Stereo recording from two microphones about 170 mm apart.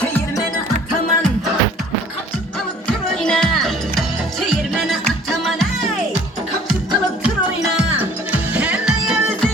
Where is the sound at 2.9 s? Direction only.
5° left (ahead or behind).